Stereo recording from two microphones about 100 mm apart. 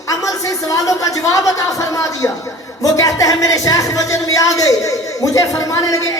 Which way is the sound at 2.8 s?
35° left (ahead or behind).